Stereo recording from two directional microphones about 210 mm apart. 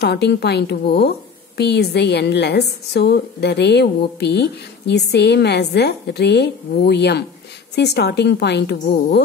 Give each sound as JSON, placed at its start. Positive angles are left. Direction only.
{"t": 0.0, "sound": "a woman's voice", "side_deg": 50}